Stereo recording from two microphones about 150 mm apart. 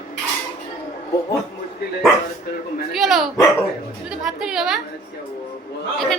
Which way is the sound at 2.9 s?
Centre (ahead or behind).